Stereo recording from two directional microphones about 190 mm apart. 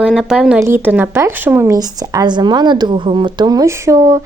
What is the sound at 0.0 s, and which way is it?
Speech, centre (ahead or behind).